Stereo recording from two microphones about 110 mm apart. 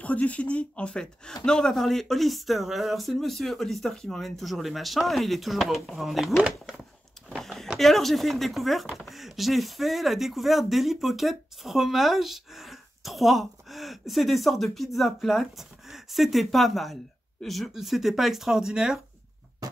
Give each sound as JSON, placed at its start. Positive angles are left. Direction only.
{"t": 0.0, "sound": "speech", "side_deg": 10}
{"t": 7.3, "sound": "a sound", "side_deg": 0}
{"t": 8.9, "sound": "speech", "side_deg": 0}